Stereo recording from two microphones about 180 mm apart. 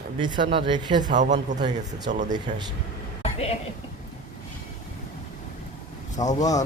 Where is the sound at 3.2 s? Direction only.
35° left (ahead or behind).